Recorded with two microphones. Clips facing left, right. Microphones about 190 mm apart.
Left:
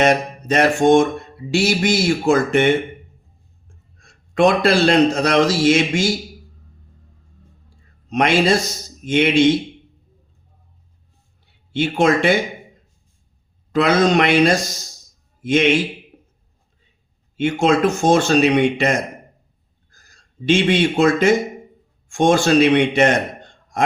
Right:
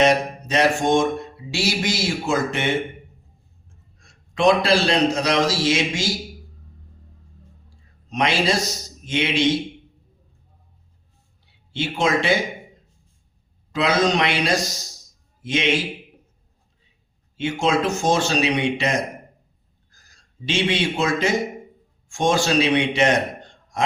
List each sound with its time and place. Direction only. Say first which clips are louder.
0.0 s a man's voice: left 1 dB; 55° left (ahead or behind)
4.4 s a man's voice: left 3 dB; 55° left (ahead or behind)
8.1 s a man's voice: left 5 dB; 55° left (ahead or behind)
11.7 s speech: left 5 dB; 55° left (ahead or behind)
13.7 s a man's voice: left 5 dB; 55° left (ahead or behind)
17.3 s a man's voice: left 5 dB; 55° left (ahead or behind)
20.4 s a man's voice: left 6 dB; 55° left (ahead or behind)